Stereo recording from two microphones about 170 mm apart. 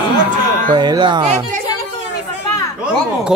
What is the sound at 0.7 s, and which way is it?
Speech, 25° right (ahead or behind).